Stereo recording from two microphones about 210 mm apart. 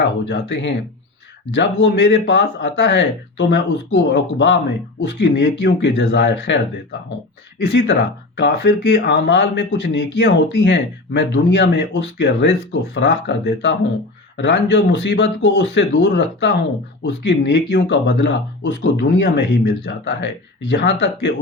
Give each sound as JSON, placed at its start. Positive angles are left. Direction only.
{"t": 0.0, "sound": "speech", "side_deg": 55}
{"t": 7.6, "sound": "speech", "side_deg": 55}